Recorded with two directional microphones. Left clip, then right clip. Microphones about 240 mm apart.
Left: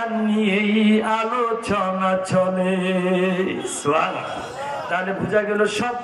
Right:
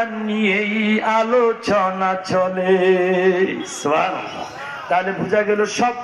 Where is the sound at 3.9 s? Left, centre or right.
Right.